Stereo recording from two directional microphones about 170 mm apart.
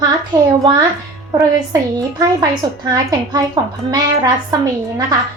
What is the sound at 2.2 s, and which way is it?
A child's voice, 20° right (ahead or behind).